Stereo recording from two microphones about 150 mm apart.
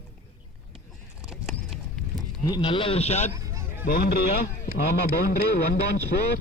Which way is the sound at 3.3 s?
20° right (ahead or behind).